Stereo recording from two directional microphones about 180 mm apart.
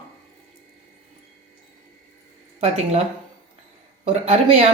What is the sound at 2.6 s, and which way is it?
Speech, 35° right (ahead or behind).